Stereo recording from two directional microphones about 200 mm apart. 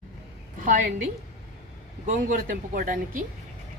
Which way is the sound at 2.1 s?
40° right (ahead or behind).